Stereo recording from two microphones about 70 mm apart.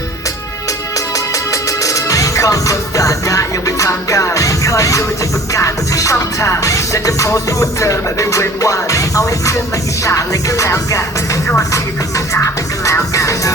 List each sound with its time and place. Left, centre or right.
1.8 s music: left